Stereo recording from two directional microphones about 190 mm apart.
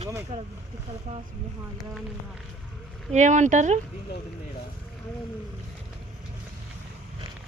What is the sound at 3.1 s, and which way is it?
Speech, 40° right (ahead or behind).